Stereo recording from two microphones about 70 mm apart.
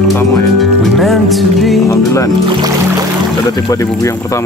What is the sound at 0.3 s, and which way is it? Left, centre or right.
Music, centre.